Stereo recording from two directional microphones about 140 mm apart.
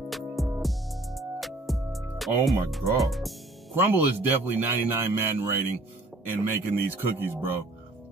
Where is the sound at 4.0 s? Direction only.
15° right (ahead or behind).